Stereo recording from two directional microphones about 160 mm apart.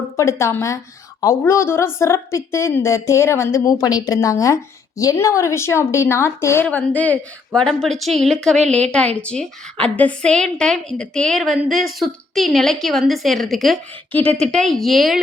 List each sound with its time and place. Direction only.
0.2 s a woman's voice: 15° left (ahead or behind); by 15.2 s centre (ahead or behind)